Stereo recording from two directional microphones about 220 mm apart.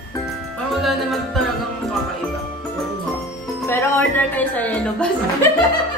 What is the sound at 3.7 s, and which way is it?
A woman's voice, 10° left (ahead or behind).